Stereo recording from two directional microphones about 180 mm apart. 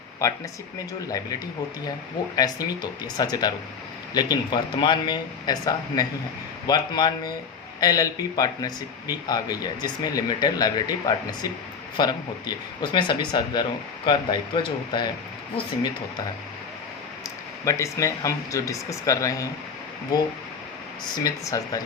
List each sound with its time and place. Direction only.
0.2 s speech: 15° left (ahead or behind)
17.2 s speech: 15° left (ahead or behind)
21.2 s speech: 20° left (ahead or behind)